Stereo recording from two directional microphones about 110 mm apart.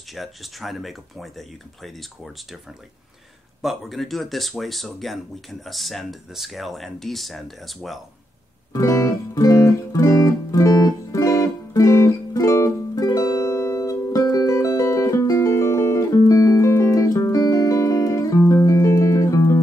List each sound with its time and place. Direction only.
0.1 s speech: centre (ahead or behind)
3.6 s speech: centre (ahead or behind)
8.7 s music: 30° left (ahead or behind)